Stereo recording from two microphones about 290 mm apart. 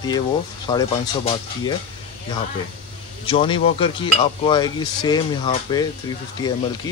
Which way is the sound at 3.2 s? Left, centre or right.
Centre.